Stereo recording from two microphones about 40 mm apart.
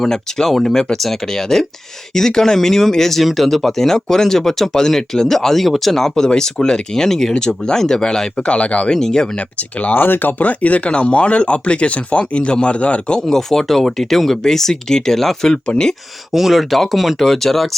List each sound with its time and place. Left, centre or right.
0.0 s speech: centre
8.5 s speech: left
8.9 s speech: centre
9.3 s speech: left
9.9 s a man's voice: left
13.2 s a man's voice: centre
16.3 s speech: centre